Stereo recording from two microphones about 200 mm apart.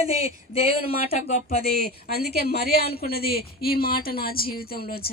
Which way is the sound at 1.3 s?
35° left (ahead or behind).